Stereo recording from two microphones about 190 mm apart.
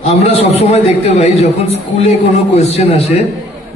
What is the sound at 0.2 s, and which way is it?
A man's voice, 35° left (ahead or behind).